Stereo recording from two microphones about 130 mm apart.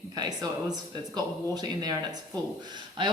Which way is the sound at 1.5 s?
30° right (ahead or behind).